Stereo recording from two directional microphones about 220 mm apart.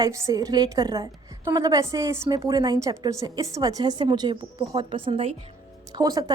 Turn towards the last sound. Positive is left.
turn(degrees=-15)  # may be behind; listen again after turning